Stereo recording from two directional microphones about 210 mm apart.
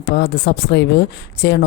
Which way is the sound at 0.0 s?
50° left (ahead or behind).